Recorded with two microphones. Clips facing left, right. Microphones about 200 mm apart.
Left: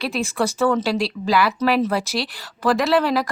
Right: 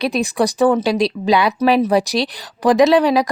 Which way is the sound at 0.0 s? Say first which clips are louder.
Right 5 dB; 15° right (ahead or behind).